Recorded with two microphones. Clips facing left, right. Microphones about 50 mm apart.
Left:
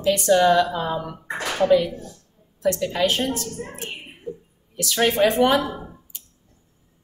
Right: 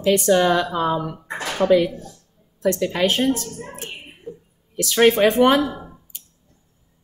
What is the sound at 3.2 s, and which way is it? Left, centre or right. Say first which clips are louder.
Speech: right 5 dB; right.